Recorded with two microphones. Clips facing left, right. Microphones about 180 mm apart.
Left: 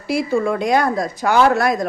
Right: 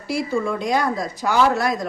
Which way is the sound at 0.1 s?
70° left (ahead or behind).